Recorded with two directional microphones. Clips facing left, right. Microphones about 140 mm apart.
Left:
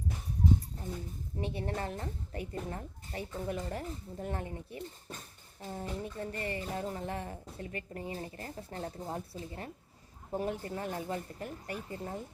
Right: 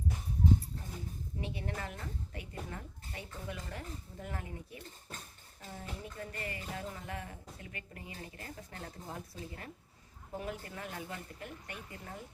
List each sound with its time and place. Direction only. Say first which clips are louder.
1.4 s speech: left 5 dB; 35° left (ahead or behind)